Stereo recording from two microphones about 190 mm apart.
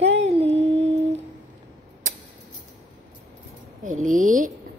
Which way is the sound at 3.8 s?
40° right (ahead or behind).